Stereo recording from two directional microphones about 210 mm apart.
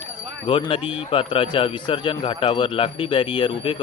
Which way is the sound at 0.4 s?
25° left (ahead or behind).